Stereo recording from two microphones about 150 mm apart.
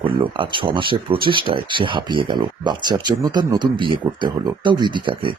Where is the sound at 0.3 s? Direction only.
35° right (ahead or behind).